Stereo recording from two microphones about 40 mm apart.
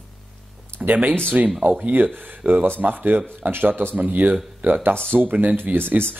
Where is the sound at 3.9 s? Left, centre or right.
Right.